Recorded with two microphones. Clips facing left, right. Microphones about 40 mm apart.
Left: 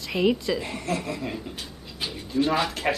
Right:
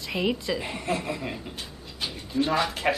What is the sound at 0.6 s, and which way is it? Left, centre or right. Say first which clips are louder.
A woman's voice: even; centre.